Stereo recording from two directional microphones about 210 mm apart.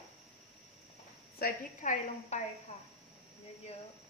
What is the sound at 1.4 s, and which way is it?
A woman's voice, 35° left (ahead or behind).